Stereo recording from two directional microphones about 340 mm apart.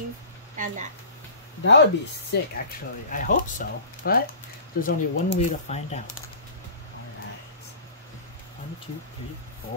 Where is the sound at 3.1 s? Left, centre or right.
Left.